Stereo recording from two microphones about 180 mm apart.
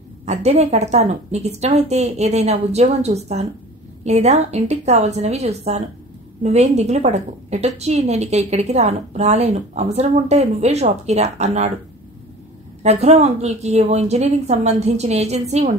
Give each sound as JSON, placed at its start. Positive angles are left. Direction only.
{"t": 0.2, "sound": "a woman's voice", "side_deg": -40}
{"t": 12.8, "sound": "a woman's voice", "side_deg": -40}